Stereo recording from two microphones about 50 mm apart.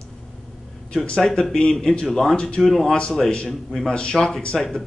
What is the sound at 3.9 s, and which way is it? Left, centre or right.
Speech, centre.